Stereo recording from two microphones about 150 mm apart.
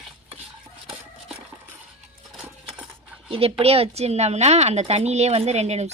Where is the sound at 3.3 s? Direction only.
40° right (ahead or behind).